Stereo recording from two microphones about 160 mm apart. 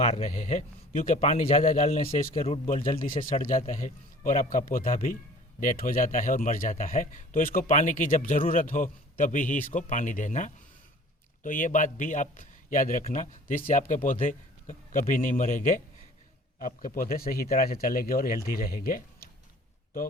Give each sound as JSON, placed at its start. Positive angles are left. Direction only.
{"t": 0.0, "sound": "speech", "side_deg": 40}
{"t": 2.3, "sound": "speech", "side_deg": 40}
{"t": 2.8, "sound": "a man's voice", "side_deg": 60}